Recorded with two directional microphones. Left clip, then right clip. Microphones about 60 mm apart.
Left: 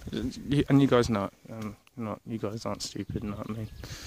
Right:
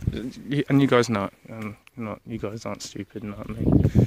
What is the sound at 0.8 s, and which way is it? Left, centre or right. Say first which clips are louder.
Speech: right 5 dB; centre.